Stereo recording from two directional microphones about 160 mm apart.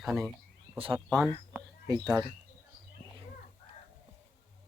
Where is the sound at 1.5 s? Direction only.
25° right (ahead or behind).